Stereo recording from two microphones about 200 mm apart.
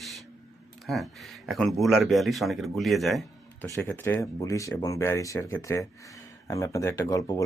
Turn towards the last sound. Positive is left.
turn(degrees=15)  # may be behind; listen again after turning